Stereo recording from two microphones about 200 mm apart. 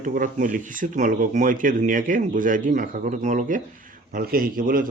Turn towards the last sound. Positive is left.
turn(degrees=-45)  # may be behind; listen again after turning